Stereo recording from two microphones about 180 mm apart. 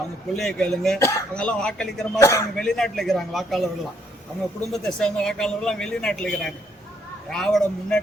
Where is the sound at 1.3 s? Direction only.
5° left (ahead or behind).